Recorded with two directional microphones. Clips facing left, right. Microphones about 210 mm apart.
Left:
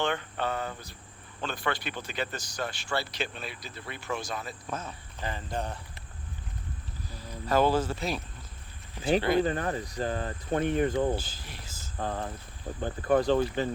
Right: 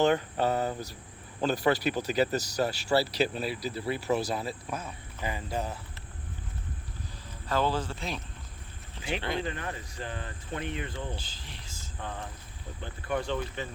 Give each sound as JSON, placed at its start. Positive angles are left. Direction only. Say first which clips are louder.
{"t": 0.0, "sound": "speech", "louder": "right 5 dB", "side_deg": -40}
{"t": 4.7, "sound": "speech", "louder": "even", "side_deg": -10}
{"t": 7.4, "sound": "speech", "louder": "left 4 dB", "side_deg": 10}
{"t": 7.7, "sound": "speech", "louder": "left 5 dB", "side_deg": 40}
{"t": 9.4, "sound": "speech", "louder": "left 7 dB", "side_deg": 40}
{"t": 11.2, "sound": "speech", "louder": "left 3 dB", "side_deg": 10}
{"t": 11.9, "sound": "speech", "louder": "left 6 dB", "side_deg": 40}